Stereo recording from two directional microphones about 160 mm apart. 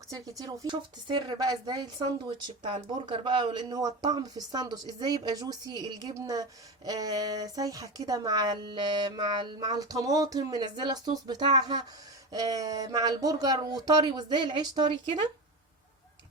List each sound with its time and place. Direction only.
0.1 s a woman's voice: 20° right (ahead or behind)